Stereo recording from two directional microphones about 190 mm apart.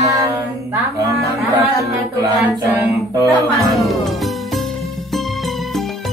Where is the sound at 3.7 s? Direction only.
Centre (ahead or behind).